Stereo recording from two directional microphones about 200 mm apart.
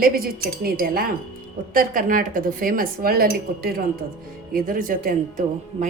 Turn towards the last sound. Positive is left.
turn(degrees=-40)  # may be behind; listen again after turning